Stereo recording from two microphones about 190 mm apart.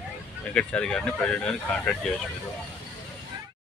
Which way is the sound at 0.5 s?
5° left (ahead or behind).